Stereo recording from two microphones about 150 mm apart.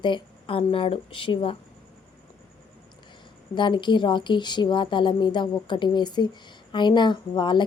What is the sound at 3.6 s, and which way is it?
A woman's voice, 30° left (ahead or behind).